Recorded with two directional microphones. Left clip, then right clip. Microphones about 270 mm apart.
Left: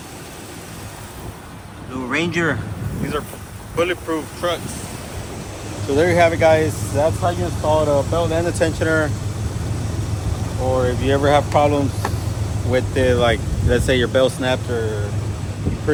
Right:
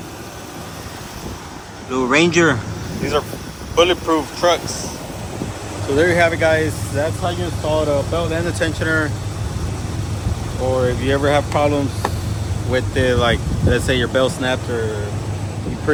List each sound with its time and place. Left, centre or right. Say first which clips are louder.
2.0 s speech: right 6 dB; centre
3.8 s speech: right 6 dB; centre
5.9 s speech: even; centre
10.8 s speech: even; centre